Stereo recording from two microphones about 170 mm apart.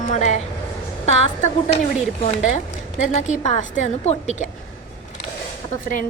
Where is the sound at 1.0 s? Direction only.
40° left (ahead or behind).